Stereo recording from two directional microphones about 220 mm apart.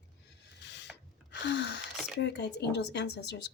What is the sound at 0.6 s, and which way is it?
Rub, 50° left (ahead or behind).